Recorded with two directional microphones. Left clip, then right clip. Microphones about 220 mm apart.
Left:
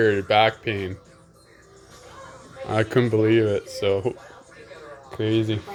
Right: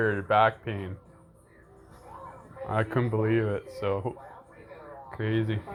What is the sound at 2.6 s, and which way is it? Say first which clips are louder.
Speech: left 7 dB; 40° left (ahead or behind).